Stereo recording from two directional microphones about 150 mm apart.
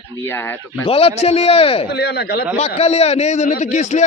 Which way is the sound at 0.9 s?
40° left (ahead or behind).